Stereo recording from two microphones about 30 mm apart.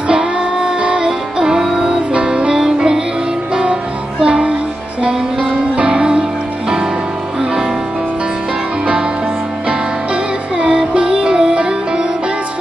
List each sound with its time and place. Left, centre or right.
0.1 s music: right
2.1 s music: right
4.2 s music: right
11.0 s music: right